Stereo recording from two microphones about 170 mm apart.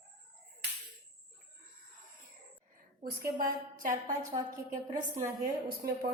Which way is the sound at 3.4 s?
55° right (ahead or behind).